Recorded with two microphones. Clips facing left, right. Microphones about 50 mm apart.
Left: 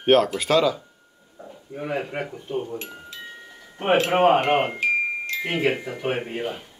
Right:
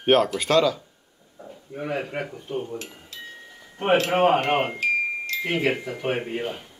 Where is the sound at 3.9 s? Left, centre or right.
Centre.